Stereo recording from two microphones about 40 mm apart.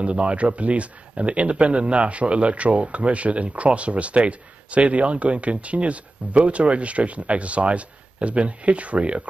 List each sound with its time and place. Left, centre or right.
0.0 s speech: right